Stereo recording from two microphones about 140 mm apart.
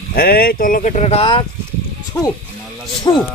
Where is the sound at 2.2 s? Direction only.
15° left (ahead or behind).